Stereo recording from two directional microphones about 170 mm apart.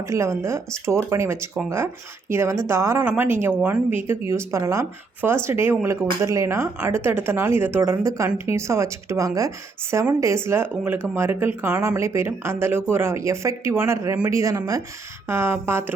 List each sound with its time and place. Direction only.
0.0 s speech: 15° right (ahead or behind)